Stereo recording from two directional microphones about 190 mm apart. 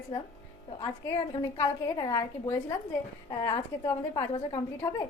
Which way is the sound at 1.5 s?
20° left (ahead or behind).